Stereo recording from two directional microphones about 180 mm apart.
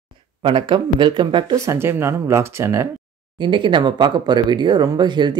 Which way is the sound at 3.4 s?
25° right (ahead or behind).